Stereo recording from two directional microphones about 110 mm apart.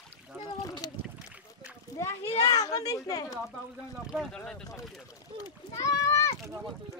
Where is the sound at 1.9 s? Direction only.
25° left (ahead or behind).